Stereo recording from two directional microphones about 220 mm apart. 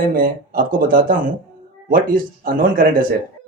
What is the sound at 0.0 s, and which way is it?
Speech, 40° right (ahead or behind).